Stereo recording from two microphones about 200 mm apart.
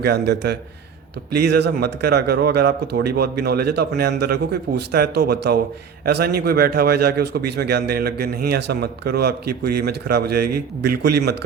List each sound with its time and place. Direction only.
0.0 s a man's voice: 55° right (ahead or behind)